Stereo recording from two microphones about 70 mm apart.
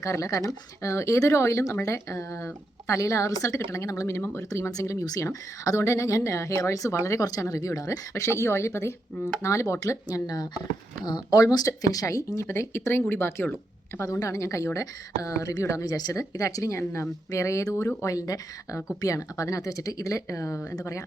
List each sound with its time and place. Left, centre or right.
0.0 s speech: left
10.1 s speech: left
11.0 s speech: left
11.5 s speech: left
14.0 s speech: left
16.1 s speech: left
16.7 s speech: left